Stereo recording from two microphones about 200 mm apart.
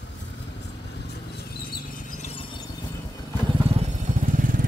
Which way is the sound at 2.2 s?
25° left (ahead or behind).